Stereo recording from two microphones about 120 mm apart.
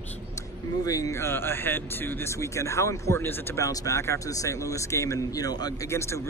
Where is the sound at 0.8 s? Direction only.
30° left (ahead or behind).